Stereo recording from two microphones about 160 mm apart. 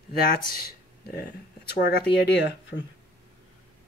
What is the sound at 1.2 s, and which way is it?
Speech, 90° left.